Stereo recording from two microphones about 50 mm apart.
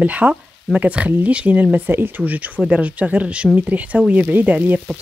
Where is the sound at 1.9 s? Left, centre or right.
Right.